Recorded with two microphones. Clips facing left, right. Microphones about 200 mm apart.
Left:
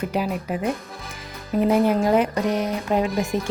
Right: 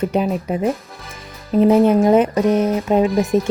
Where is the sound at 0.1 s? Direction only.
30° right (ahead or behind).